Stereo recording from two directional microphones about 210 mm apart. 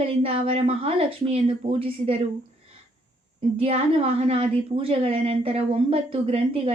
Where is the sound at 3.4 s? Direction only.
30° right (ahead or behind).